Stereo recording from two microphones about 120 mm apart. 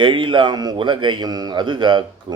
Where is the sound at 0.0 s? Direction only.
40° right (ahead or behind).